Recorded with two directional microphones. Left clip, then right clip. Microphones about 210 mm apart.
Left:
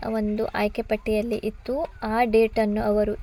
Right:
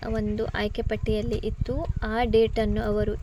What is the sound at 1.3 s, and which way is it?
Speech, 25° left (ahead or behind).